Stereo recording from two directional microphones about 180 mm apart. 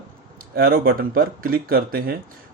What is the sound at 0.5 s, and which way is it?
Speech, 55° right (ahead or behind).